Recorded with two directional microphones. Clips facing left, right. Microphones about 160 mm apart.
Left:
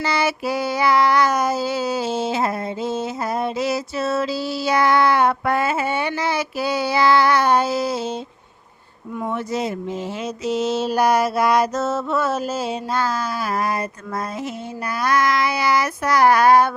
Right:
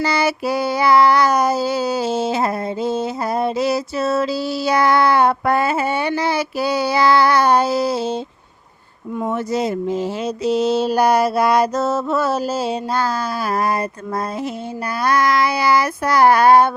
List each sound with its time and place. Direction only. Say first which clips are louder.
0.0 s child singing: right 3 dB; 40° right (ahead or behind)
9.2 s child singing: right 3 dB; 40° right (ahead or behind)
15.0 s child singing: right 2 dB; 35° right (ahead or behind)